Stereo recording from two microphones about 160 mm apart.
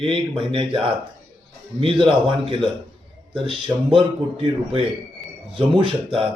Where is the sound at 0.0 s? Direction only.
35° right (ahead or behind).